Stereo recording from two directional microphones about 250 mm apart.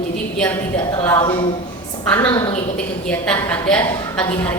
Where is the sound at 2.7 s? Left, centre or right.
Centre.